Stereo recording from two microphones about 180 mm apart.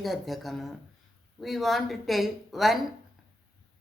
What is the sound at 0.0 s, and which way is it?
Speech, centre (ahead or behind).